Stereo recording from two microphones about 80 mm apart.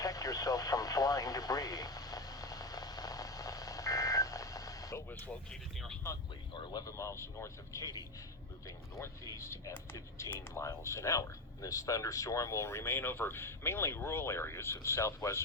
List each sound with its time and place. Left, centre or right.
0.0 s radio: left
5.0 s speech: left
5.5 s speech: centre
6.5 s speech: left
6.8 s speech: left